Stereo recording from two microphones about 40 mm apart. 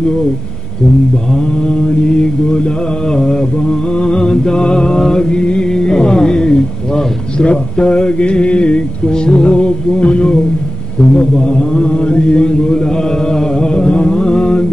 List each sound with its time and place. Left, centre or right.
1.7 s mantra: left